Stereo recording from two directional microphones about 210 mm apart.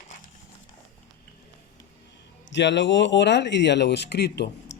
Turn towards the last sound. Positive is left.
turn(degrees=50)  # may be behind; listen again after turning